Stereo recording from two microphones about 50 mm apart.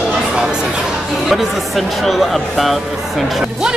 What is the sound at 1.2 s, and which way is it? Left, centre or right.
Speech, centre.